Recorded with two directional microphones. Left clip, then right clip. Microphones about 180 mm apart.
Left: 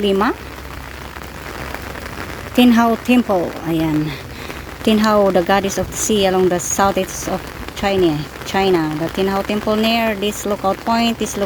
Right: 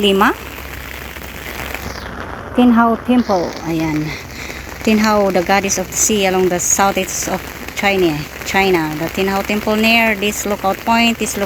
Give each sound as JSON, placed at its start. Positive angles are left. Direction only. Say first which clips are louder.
{"t": 0.0, "sound": "speech", "louder": "right 4 dB", "side_deg": 10}
{"t": 2.6, "sound": "speech", "louder": "right 1 dB", "side_deg": 40}
{"t": 3.4, "sound": "speech", "louder": "even", "side_deg": 15}